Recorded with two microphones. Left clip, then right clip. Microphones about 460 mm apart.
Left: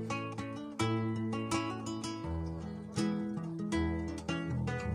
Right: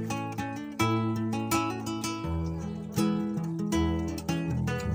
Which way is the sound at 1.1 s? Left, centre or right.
Left.